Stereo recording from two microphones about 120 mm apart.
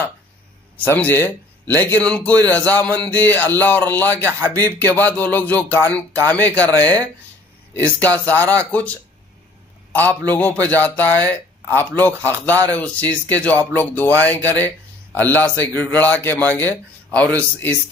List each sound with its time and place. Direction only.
0.7 s a man's voice: 15° left (ahead or behind)
9.9 s a man's voice: 15° left (ahead or behind)